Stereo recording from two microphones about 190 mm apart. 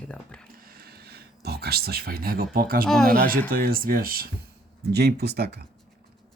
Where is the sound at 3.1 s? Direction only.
50° right (ahead or behind).